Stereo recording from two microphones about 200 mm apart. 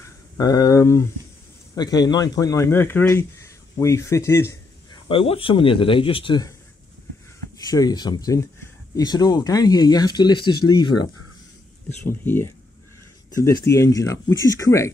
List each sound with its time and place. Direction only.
0.4 s speech: 20° left (ahead or behind)
5.0 s speech: 25° left (ahead or behind)
7.7 s speech: 20° left (ahead or behind)
12.0 s speech: 10° left (ahead or behind)